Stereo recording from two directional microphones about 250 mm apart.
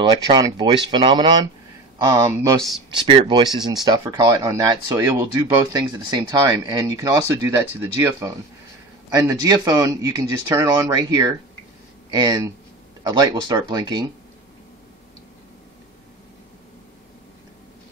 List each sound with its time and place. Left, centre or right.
0.0 s speech: centre